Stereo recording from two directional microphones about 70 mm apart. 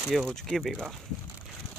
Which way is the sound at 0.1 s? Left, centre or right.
Centre.